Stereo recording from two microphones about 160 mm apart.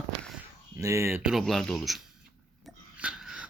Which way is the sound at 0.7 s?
20° right (ahead or behind).